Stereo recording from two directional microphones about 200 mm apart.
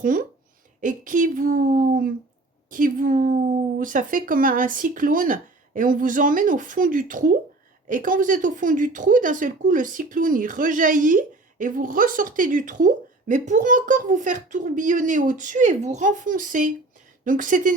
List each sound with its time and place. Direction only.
0.0 s speech: 45° right (ahead or behind)